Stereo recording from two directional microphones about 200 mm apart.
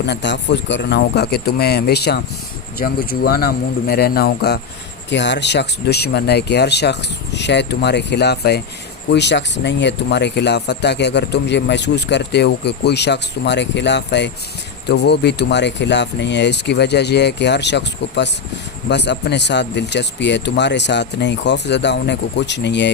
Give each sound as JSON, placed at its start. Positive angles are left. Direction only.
{"t": 0.0, "sound": "speech", "side_deg": 60}